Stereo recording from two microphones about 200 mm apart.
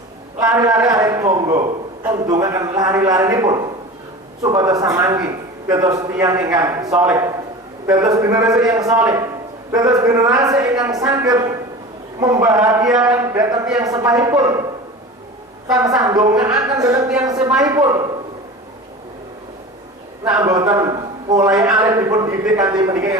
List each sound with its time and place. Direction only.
0.3 s a man's voice: 15° right (ahead or behind)
15.6 s a woman's voice: 20° right (ahead or behind)
20.3 s a man's voice: 20° right (ahead or behind)